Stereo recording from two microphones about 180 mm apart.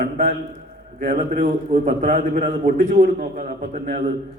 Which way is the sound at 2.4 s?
50° right (ahead or behind).